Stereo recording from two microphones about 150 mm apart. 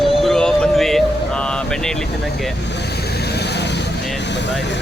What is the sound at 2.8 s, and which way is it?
Vehicle, 90° left.